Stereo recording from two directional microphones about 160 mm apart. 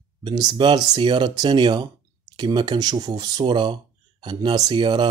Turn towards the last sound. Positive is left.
turn(degrees=-30)  # may be behind; listen again after turning